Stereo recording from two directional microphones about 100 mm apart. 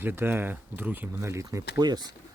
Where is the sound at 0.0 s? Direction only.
20° right (ahead or behind).